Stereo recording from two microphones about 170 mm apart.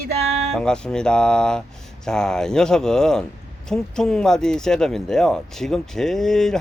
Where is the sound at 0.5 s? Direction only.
5° left (ahead or behind).